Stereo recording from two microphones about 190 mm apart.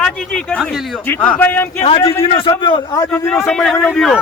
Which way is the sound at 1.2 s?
10° left (ahead or behind).